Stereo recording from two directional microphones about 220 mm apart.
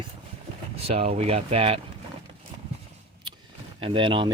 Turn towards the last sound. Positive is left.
turn(degrees=-20)  # may be behind; listen again after turning